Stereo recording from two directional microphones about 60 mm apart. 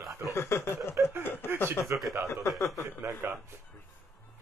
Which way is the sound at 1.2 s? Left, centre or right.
Left.